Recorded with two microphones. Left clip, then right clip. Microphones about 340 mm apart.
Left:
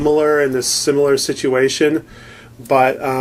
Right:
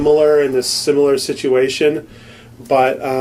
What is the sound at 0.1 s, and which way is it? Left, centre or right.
Speech, left.